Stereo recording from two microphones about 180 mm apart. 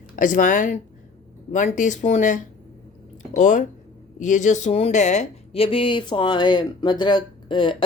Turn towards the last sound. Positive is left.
turn(degrees=25)  # may be behind; listen again after turning